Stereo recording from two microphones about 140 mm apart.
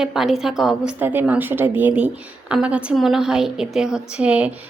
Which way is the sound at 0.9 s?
15° right (ahead or behind).